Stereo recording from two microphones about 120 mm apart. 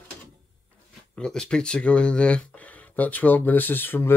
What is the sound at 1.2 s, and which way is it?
Speech, 10° left (ahead or behind).